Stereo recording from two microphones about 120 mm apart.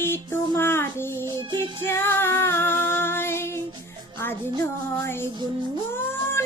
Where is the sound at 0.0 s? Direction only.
20° left (ahead or behind).